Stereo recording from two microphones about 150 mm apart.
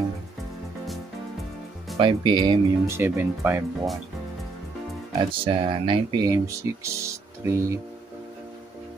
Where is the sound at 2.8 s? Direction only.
15° right (ahead or behind).